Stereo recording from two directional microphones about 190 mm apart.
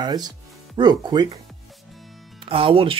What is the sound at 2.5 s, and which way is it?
Speech, 30° right (ahead or behind).